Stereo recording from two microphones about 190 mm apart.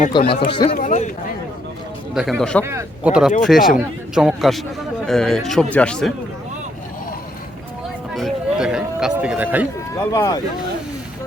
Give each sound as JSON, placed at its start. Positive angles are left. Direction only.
{"t": 0.1, "sound": "speech", "side_deg": 30}
{"t": 0.8, "sound": "speech", "side_deg": 40}
{"t": 2.1, "sound": "speech", "side_deg": 0}
{"t": 2.6, "sound": "speech", "side_deg": -10}
{"t": 8.1, "sound": "a sound", "side_deg": 0}
{"t": 10.1, "sound": "speech", "side_deg": 15}